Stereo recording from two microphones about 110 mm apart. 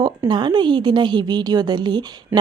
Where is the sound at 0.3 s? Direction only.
45° right (ahead or behind).